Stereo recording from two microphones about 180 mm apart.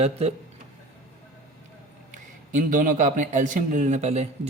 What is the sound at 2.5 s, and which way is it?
A man's voice, 45° right (ahead or behind).